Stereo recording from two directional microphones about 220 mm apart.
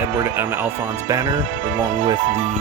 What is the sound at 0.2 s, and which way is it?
Speech, 10° right (ahead or behind).